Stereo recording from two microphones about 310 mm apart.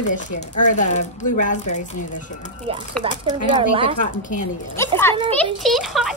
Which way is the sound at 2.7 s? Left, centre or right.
Centre.